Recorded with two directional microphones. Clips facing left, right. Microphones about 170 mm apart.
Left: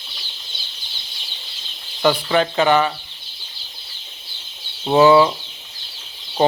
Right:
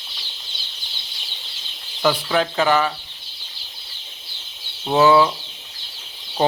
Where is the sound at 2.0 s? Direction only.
Centre (ahead or behind).